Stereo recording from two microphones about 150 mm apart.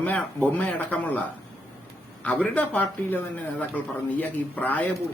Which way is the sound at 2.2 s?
10° left (ahead or behind).